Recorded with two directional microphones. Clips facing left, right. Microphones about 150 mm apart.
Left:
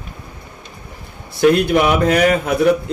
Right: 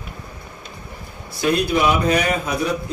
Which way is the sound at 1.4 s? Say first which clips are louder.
Left 6 dB; 60° left (ahead or behind).